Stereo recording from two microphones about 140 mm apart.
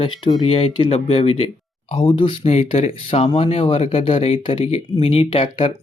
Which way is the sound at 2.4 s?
50° left (ahead or behind).